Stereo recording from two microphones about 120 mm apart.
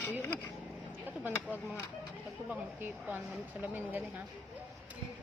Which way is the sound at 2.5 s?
15° right (ahead or behind).